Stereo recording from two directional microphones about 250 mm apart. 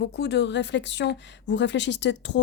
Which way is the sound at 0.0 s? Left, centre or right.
Left.